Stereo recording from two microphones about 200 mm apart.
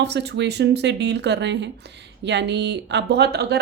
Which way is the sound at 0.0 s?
60° right (ahead or behind).